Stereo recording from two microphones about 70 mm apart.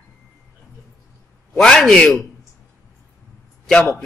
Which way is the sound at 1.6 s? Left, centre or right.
Centre.